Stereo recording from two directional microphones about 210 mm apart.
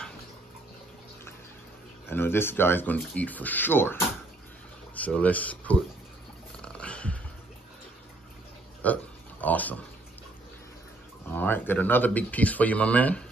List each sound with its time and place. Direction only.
2.0 s speech: 10° left (ahead or behind)
6.6 s dog: 5° left (ahead or behind)
8.8 s speech: 5° left (ahead or behind)
11.2 s speech: 10° left (ahead or behind)